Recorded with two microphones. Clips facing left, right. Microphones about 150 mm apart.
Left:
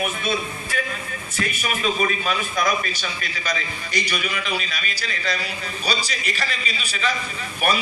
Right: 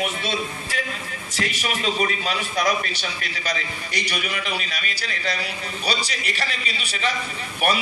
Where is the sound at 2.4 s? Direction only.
70° right (ahead or behind).